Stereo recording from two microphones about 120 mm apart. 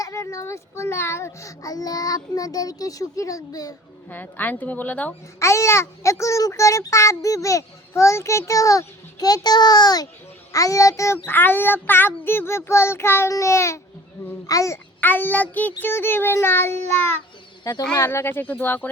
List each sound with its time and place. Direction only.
0.0 s a child's voice: 25° left (ahead or behind)
4.1 s speech: 15° left (ahead or behind)
5.4 s a child's voice: 25° left (ahead or behind)
15.0 s a child's voice: 15° left (ahead or behind)
17.6 s speech: 30° left (ahead or behind)
17.9 s speech: 20° left (ahead or behind)